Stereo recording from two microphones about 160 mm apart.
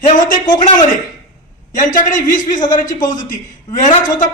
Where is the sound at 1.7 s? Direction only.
55° left (ahead or behind).